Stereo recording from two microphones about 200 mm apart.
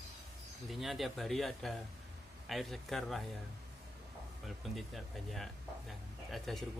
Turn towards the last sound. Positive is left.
turn(degrees=0)  # may be behind; listen again after turning